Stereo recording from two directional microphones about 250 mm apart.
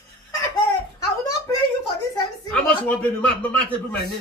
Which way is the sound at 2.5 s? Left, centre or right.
Centre.